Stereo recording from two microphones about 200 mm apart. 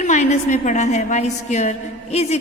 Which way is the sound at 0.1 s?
35° left (ahead or behind).